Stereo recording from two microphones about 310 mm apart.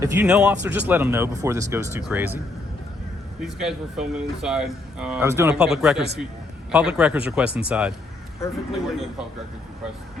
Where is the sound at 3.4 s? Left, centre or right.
Centre.